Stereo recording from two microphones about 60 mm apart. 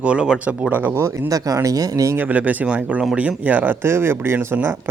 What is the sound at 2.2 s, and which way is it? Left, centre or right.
Speech, right.